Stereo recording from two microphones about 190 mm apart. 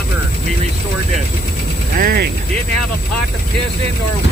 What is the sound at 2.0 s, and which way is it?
Speech, 55° right (ahead or behind).